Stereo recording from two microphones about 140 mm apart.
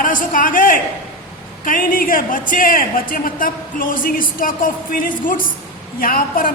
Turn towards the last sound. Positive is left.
turn(degrees=90)